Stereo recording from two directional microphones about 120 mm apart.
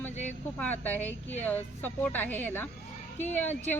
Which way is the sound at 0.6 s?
15° left (ahead or behind).